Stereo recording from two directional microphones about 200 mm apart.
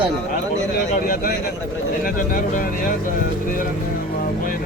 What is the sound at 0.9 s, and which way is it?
Speech, 45° left (ahead or behind).